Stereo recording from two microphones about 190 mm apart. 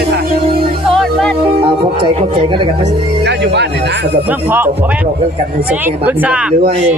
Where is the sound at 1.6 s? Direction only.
25° right (ahead or behind).